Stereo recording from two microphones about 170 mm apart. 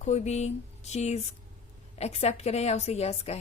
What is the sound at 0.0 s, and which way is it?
A woman's voice, 40° left (ahead or behind).